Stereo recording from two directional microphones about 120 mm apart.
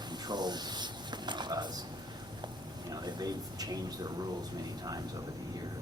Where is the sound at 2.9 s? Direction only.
35° right (ahead or behind).